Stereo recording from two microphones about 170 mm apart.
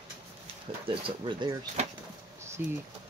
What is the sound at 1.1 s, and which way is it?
Speech, 30° right (ahead or behind).